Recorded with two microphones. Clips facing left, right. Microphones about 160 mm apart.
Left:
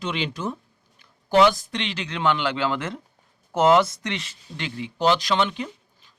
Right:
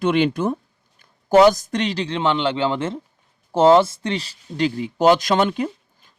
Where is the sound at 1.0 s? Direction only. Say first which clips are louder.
Right 5 dB; 45° right (ahead or behind).